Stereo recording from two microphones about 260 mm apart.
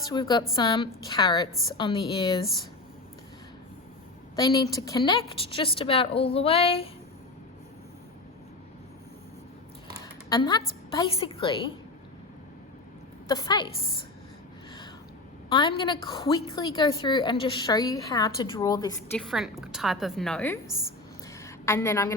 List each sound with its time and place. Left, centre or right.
0.0 s a woman's voice: centre
4.4 s a woman's voice: centre
10.2 s a woman's voice: centre
13.2 s a woman's voice: centre
15.4 s a woman's voice: centre
19.1 s a woman's voice: centre
21.2 s a sound: centre